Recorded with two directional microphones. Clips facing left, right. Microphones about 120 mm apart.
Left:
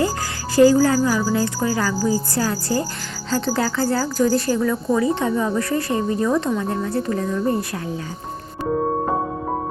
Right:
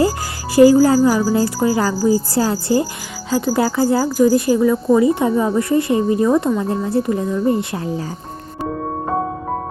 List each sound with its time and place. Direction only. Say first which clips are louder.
0.5 s a woman's voice: right 4 dB; 20° right (ahead or behind)
3.2 s a woman's voice: right 4 dB; 10° right (ahead or behind)